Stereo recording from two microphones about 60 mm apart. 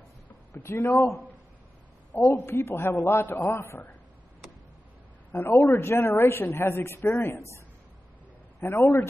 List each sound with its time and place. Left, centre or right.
0.5 s speech: left
2.2 s a woman's voice: left
5.3 s a woman's voice: left
8.5 s a woman's voice: left